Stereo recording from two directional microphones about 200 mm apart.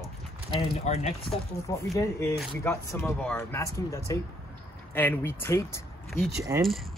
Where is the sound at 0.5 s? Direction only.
30° left (ahead or behind).